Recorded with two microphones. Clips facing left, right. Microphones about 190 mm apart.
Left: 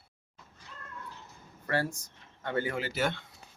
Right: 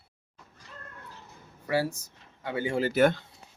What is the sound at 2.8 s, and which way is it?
Speech, 50° right (ahead or behind).